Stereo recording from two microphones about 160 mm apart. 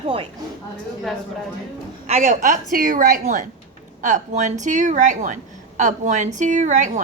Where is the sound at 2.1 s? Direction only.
50° right (ahead or behind).